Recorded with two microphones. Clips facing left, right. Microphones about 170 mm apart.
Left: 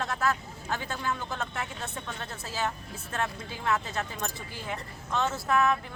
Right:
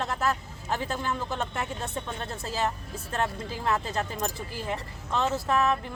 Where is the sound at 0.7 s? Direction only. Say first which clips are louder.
Right 3 dB; 30° right (ahead or behind).